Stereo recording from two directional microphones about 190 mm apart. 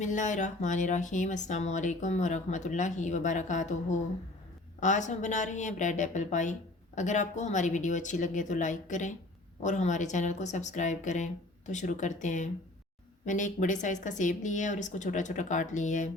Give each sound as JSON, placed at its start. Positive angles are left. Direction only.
{"t": 0.0, "sound": "speech", "side_deg": 40}